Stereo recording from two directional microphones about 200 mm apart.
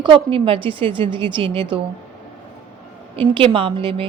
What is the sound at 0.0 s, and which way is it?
A woman's voice, 25° right (ahead or behind).